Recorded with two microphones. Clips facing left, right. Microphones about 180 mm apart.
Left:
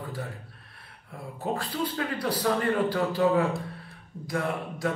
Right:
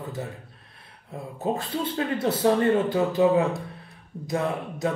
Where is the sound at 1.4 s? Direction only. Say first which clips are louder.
Right 3 dB; 25° right (ahead or behind).